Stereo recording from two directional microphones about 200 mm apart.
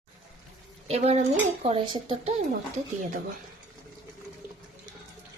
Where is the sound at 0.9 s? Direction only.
30° right (ahead or behind).